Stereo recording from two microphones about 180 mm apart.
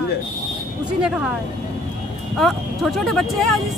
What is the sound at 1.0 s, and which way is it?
Speech, 5° right (ahead or behind).